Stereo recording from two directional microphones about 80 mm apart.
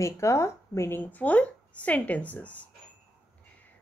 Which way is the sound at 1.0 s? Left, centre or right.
Centre.